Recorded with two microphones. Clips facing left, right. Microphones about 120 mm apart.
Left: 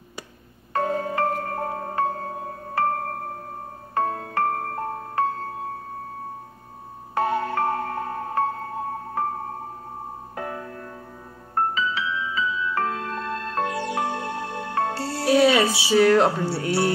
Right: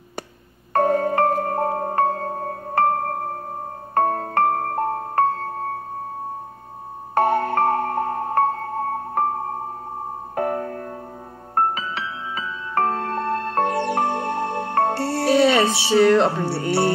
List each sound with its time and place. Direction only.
0.7 s music: 50° right (ahead or behind)
7.2 s music: 55° right (ahead or behind)
10.3 s music: 50° right (ahead or behind)
15.2 s music: 5° left (ahead or behind)